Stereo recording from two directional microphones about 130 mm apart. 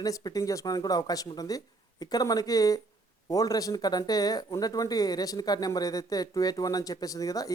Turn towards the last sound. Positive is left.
turn(degrees=25)  # may be behind; listen again after turning